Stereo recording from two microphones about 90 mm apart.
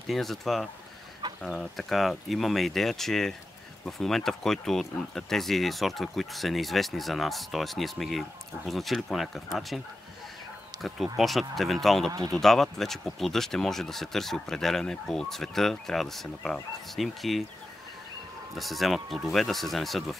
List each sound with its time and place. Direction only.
0.1 s speech: centre (ahead or behind)
10.7 s a sound: 55° right (ahead or behind)
11.1 s speech: centre (ahead or behind)
18.6 s speech: centre (ahead or behind)